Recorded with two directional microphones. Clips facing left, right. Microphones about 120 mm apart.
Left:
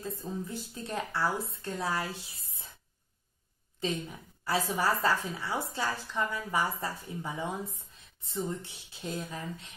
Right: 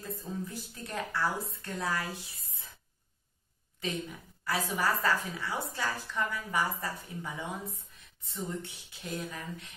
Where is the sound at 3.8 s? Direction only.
30° left (ahead or behind).